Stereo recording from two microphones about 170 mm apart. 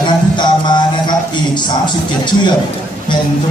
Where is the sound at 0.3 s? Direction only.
25° left (ahead or behind).